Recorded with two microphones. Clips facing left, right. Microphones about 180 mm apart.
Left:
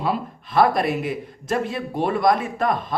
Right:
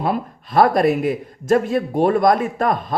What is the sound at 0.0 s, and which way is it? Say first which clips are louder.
Speech: right 3 dB; 50° right (ahead or behind).